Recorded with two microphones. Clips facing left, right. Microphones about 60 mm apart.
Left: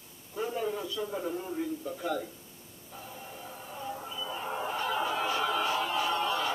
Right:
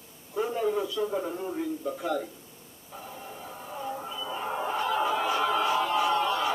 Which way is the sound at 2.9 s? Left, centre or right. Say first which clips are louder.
Right 3 dB; centre.